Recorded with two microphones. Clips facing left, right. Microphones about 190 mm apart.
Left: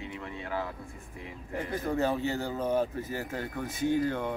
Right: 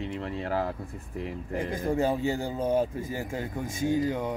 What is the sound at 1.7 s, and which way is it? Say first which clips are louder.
Speech: right 2 dB; 10° right (ahead or behind).